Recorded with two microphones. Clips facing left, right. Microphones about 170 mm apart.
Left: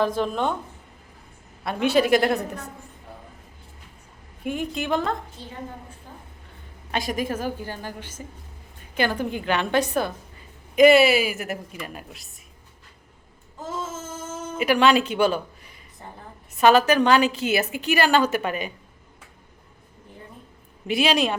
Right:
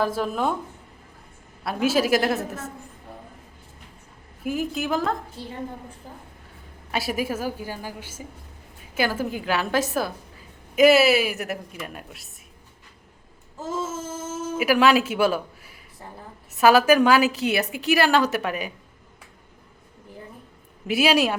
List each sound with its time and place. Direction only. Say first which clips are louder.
0.0 s a woman's voice: left 1 dB; 5° right (ahead or behind)
1.6 s a woman's voice: left 1 dB; centre (ahead or behind)
4.4 s a woman's voice: right 1 dB; centre (ahead or behind)
6.9 s a woman's voice: even; 5° right (ahead or behind)
14.3 s a woman's voice: even; 5° right (ahead or behind)
20.8 s a woman's voice: right 1 dB; 5° right (ahead or behind)